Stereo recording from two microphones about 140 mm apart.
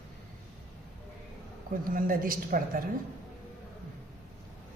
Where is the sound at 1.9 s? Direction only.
85° right.